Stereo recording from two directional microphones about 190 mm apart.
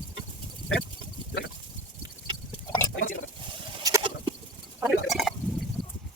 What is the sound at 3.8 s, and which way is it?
Sheep, 20° right (ahead or behind).